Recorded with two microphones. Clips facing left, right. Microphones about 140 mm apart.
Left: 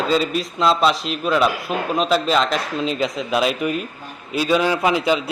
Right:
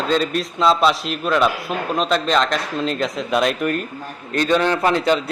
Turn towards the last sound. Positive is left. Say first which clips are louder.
# right 1 dB
turn(degrees=5)  # may be behind; listen again after turning